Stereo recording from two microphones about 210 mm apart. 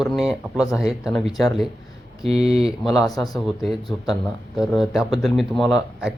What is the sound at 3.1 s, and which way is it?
Speech, 15° left (ahead or behind).